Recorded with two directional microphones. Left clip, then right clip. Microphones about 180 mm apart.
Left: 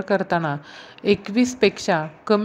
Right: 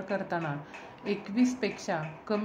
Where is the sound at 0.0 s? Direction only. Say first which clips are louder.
Left 11 dB; 35° left (ahead or behind).